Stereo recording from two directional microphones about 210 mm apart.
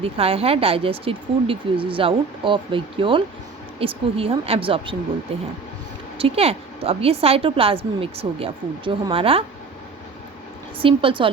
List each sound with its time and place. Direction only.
0.0 s speech: 25° right (ahead or behind)
6.1 s speech: 25° right (ahead or behind)
10.8 s speech: 25° right (ahead or behind)